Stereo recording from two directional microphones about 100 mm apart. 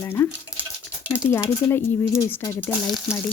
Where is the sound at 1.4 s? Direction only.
30° left (ahead or behind).